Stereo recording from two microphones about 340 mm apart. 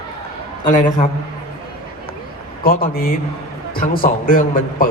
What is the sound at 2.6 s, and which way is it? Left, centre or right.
Speech, left.